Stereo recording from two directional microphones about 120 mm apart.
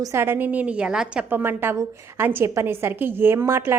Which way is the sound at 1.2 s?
20° right (ahead or behind).